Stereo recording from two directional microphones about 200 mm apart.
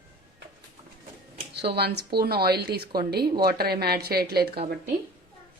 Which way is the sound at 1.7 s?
55° right (ahead or behind).